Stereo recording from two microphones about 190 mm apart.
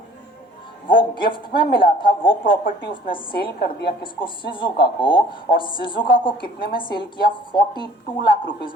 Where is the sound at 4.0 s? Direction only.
25° left (ahead or behind).